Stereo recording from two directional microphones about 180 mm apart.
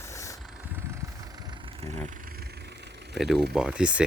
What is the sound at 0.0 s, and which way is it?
Vehicle, 15° left (ahead or behind).